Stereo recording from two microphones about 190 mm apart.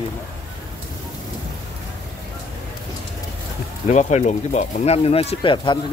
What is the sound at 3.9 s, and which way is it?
Speech, 35° left (ahead or behind).